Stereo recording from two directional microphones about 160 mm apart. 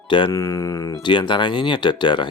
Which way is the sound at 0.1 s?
30° left (ahead or behind).